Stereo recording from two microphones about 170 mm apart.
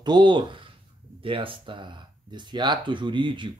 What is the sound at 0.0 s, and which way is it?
Speech, 25° right (ahead or behind).